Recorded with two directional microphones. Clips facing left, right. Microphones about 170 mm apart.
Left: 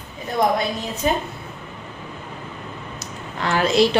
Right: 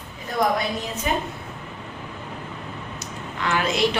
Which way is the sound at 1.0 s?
35° left (ahead or behind).